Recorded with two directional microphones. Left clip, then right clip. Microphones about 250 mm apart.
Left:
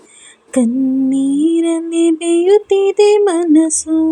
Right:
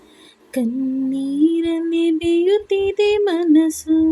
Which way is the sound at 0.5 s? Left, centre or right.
Centre.